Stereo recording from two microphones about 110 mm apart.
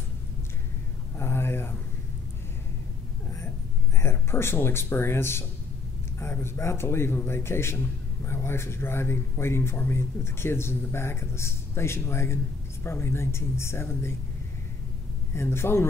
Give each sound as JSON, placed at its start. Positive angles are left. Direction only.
{"t": 1.1, "sound": "a sound", "side_deg": 20}
{"t": 4.0, "sound": "speech", "side_deg": 20}
{"t": 15.3, "sound": "speech", "side_deg": 20}